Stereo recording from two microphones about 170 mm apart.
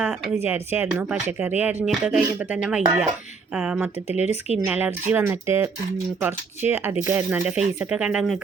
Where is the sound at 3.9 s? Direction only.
40° left (ahead or behind).